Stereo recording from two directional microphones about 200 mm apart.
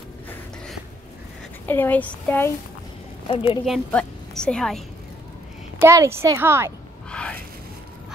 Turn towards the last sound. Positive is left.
turn(degrees=5)  # may be behind; listen again after turning